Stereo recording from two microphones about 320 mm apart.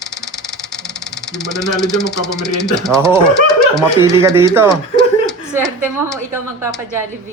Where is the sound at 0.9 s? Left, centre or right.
Left.